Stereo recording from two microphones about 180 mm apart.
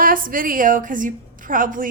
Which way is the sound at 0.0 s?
50° right (ahead or behind).